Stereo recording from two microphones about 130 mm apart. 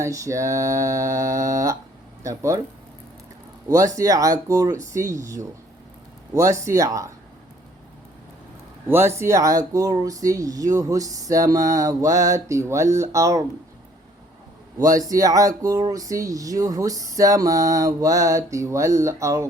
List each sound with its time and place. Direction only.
0.0 s speech: 25° right (ahead or behind)
3.7 s speech: 25° right (ahead or behind)
8.9 s speech: 20° right (ahead or behind)
14.8 s speech: 25° right (ahead or behind)